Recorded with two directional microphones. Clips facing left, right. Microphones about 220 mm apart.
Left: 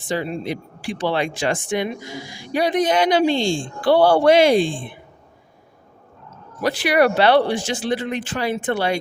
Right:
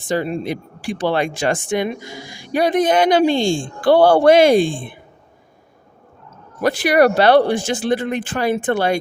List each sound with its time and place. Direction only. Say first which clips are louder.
0.1 s speech: right 3 dB; 50° right (ahead or behind)
6.6 s speech: right 3 dB; 50° right (ahead or behind)